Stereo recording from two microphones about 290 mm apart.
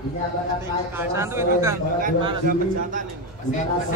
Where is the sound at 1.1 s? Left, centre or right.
Centre.